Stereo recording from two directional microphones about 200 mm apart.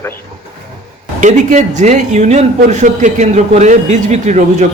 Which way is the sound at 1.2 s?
35° right (ahead or behind).